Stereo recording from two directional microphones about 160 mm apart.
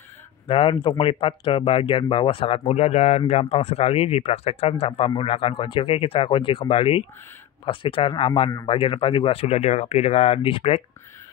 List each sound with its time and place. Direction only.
0.5 s speech: 30° left (ahead or behind)